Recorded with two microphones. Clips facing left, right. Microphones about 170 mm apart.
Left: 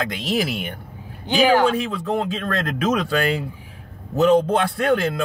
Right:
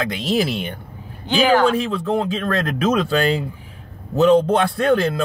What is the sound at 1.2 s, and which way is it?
Speech, 10° left (ahead or behind).